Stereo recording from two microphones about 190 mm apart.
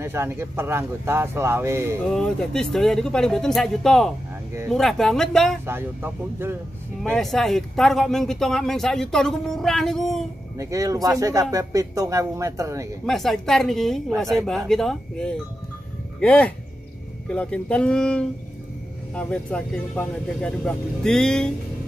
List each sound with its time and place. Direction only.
0.0 s speech: 15° right (ahead or behind)
2.1 s speech: 5° left (ahead or behind)
5.7 s speech: 10° right (ahead or behind)
7.0 s speech: centre (ahead or behind)
10.6 s speech: 15° right (ahead or behind)
13.0 s speech: centre (ahead or behind)